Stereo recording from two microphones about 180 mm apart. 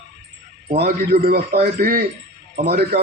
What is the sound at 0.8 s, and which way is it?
A man's voice, 60° right (ahead or behind).